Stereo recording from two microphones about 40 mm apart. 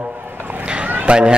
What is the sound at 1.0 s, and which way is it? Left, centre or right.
Speech, right.